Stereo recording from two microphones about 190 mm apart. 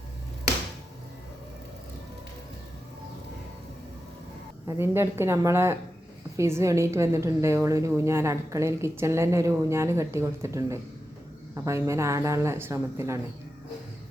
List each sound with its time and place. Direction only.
4.8 s a woman's voice: 15° right (ahead or behind)